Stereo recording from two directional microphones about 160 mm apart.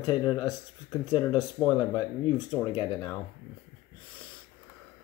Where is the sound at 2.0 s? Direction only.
30° left (ahead or behind).